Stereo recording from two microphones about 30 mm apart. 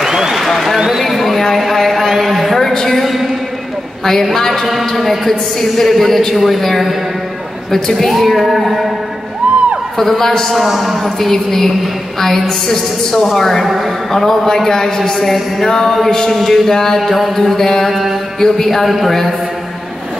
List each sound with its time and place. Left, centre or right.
0.0 s a sound: centre
0.4 s a sound: centre
2.7 s a sound: centre
4.0 s a woman's voice: centre
8.1 s speech: centre
9.4 s music: right
9.9 s a woman's voice: centre
10.5 s a woman's voice: centre
13.7 s speech: centre
14.1 s a woman's voice: centre
17.1 s speech: centre
17.8 s speech: centre
18.4 s a man's voice: centre
18.9 s speech: centre